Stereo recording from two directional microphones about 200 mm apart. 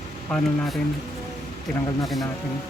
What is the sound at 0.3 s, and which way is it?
Speech, centre (ahead or behind).